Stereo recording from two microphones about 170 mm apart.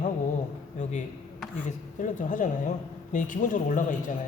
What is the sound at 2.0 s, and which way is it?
Speech, 50° left (ahead or behind).